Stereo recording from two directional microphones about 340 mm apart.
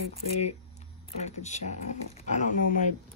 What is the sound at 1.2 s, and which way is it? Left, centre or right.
Speech, centre.